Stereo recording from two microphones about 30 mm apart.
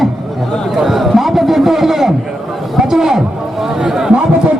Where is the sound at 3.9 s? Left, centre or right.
Centre.